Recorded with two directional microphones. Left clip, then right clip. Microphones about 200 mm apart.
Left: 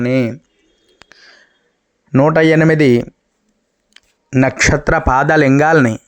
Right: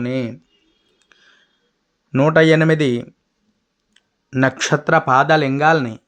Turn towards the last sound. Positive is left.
turn(degrees=35)  # may be behind; listen again after turning